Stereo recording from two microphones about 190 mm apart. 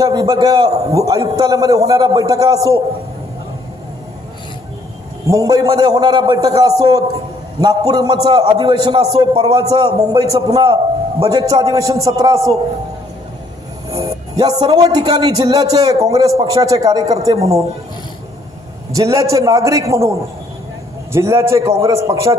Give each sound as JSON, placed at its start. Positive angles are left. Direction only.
{"t": 0.0, "sound": "a man's voice", "side_deg": -20}
{"t": 5.2, "sound": "a man's voice", "side_deg": -20}
{"t": 9.6, "sound": "a man's voice", "side_deg": -20}
{"t": 13.9, "sound": "a man's voice", "side_deg": -20}
{"t": 18.9, "sound": "a man's voice", "side_deg": -15}